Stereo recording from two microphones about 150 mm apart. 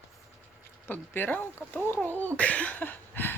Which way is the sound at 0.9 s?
15° left (ahead or behind).